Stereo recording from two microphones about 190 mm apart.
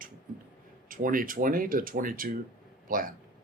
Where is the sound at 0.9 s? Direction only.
45° right (ahead or behind).